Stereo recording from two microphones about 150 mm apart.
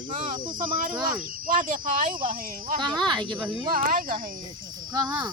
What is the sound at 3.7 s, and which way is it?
Speech, 65° right (ahead or behind).